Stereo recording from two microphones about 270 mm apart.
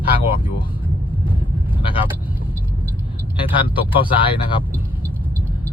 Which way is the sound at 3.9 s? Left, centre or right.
Centre.